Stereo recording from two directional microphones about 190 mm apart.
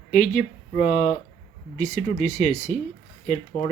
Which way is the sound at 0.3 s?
40° left (ahead or behind).